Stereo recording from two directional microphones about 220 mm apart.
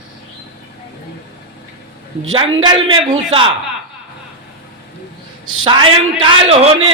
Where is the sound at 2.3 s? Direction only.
20° right (ahead or behind).